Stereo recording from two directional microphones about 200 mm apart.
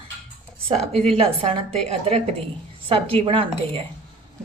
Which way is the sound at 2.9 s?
30° right (ahead or behind).